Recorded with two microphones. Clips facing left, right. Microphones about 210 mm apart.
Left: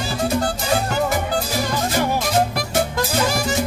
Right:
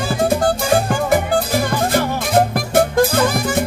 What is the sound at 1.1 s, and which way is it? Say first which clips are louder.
Music: right 6 dB; 55° right (ahead or behind).